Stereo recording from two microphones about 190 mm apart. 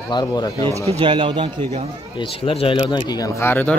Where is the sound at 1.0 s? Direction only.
25° right (ahead or behind).